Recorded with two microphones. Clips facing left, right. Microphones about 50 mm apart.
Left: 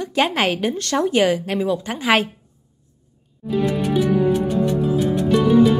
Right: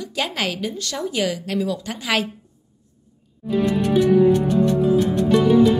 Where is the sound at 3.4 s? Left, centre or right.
Centre.